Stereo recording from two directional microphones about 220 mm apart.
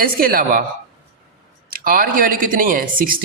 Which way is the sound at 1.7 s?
40° right (ahead or behind).